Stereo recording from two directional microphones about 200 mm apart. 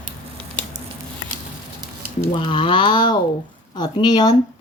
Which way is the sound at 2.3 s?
25° left (ahead or behind).